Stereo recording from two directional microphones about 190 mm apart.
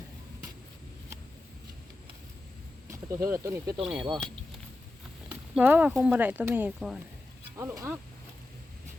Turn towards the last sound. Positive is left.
turn(degrees=-15)  # may be behind; listen again after turning